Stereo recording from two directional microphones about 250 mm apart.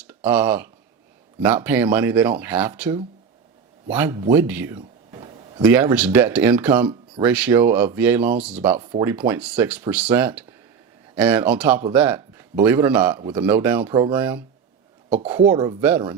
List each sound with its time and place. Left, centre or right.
0.3 s speech: centre
3.9 s speech: centre
5.2 s a sound: right
5.6 s speech: centre
8.8 s a man's voice: centre
15.1 s speech: right
15.6 s speech: centre